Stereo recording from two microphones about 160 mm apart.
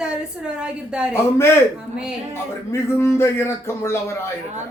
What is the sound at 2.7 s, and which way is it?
A man's voice, 15° left (ahead or behind).